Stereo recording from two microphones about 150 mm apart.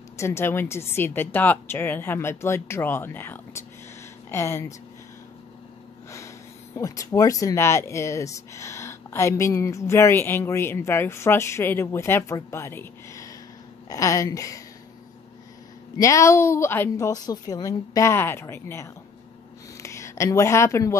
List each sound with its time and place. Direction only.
0.2 s speech: 15° left (ahead or behind)
6.1 s a woman's voice: 20° left (ahead or behind)
16.0 s a woman's voice: 20° left (ahead or behind)